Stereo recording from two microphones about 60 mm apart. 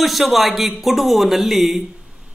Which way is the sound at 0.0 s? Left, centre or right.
Centre.